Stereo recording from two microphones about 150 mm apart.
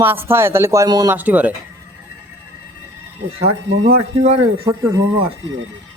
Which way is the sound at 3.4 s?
45° right (ahead or behind).